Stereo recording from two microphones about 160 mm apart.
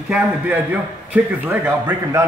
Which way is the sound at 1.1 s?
10° right (ahead or behind).